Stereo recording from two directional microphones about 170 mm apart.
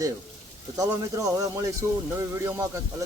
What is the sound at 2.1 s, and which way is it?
Speech, 15° right (ahead or behind).